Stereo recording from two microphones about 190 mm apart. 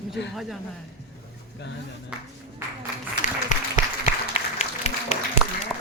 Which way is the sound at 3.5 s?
40° left (ahead or behind).